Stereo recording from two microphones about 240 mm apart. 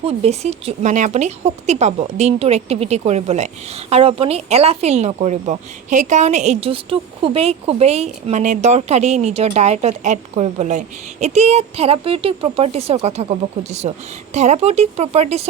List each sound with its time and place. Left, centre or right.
0.0 s speech: right